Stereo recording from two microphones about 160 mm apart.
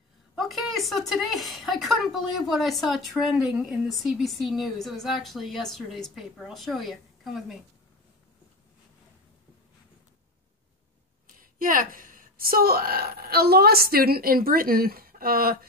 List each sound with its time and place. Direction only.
0.4 s a woman's voice: centre (ahead or behind)
11.2 s a woman's voice: 60° right (ahead or behind)